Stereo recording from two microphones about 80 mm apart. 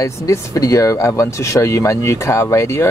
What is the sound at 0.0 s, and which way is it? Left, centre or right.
Speech, left.